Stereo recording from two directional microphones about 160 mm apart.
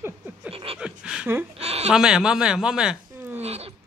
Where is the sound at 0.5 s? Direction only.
35° right (ahead or behind).